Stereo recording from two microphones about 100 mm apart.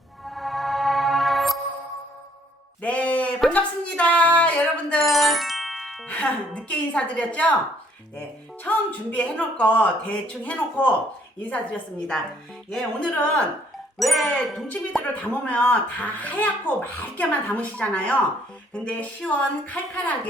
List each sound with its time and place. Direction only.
0.3 s music: centre (ahead or behind)
2.8 s a sound: 15° left (ahead or behind)
3.5 s music: 15° left (ahead or behind)
5.0 s music: centre (ahead or behind)
6.1 s speech: 15° left (ahead or behind)
8.6 s speech: 15° left (ahead or behind)
14.0 s speech: centre (ahead or behind)
15.2 s speech: 15° left (ahead or behind)